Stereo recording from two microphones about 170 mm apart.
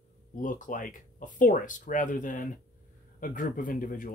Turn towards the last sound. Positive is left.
turn(degrees=50)  # may be behind; listen again after turning